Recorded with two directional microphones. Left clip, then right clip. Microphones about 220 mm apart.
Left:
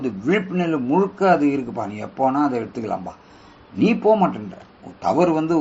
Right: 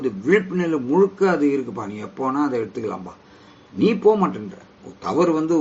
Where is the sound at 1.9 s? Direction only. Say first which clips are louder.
Left 4 dB; 10° left (ahead or behind).